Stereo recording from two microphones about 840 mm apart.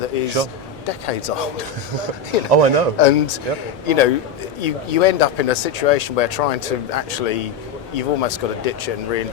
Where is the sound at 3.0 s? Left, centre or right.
Left.